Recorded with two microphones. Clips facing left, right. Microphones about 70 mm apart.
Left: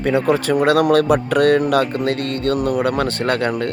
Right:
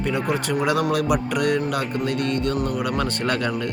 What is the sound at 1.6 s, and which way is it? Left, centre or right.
Speech, left.